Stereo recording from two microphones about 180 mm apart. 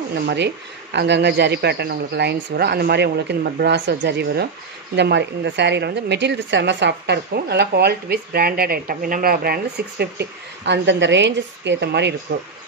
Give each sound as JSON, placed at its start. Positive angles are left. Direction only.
{"t": 0.9, "sound": "a woman's voice", "side_deg": -70}